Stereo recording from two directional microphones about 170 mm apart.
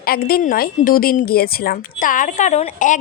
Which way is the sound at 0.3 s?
60° left (ahead or behind).